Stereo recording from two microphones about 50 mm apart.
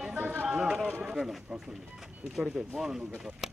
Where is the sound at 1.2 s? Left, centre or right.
Centre.